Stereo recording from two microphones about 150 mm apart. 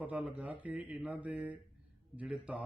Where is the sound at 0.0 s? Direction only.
10° right (ahead or behind).